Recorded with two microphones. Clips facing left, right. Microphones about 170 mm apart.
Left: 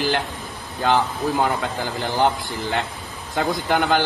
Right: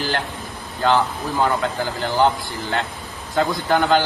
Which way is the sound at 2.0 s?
20° left (ahead or behind).